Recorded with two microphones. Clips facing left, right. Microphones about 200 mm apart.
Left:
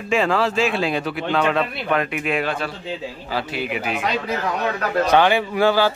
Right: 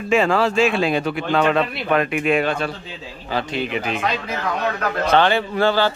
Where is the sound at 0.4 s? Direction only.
Centre (ahead or behind).